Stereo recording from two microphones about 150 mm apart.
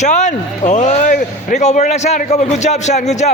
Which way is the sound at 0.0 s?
50° left (ahead or behind).